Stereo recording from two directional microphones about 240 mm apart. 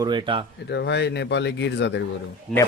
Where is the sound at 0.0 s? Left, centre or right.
Centre.